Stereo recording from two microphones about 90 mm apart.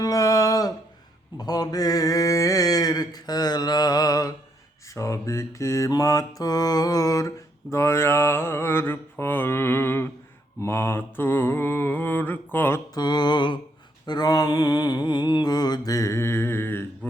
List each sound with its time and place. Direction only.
0.0 s a sound: 40° left (ahead or behind)
4.9 s mantra: 35° left (ahead or behind)
12.9 s mantra: 55° left (ahead or behind)
14.1 s mantra: 45° left (ahead or behind); by 16.8 s 25° left (ahead or behind)
17.0 s a man's voice: 20° left (ahead or behind)